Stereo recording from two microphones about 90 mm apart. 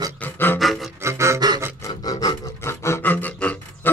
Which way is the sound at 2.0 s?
45° left (ahead or behind).